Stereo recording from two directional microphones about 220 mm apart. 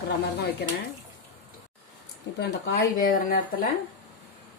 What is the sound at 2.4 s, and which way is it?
Speech, 50° left (ahead or behind).